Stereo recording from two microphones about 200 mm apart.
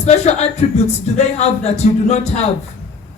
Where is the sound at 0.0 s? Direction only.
35° left (ahead or behind).